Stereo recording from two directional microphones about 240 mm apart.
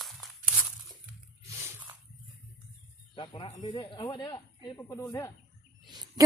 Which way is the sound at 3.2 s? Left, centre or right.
Left.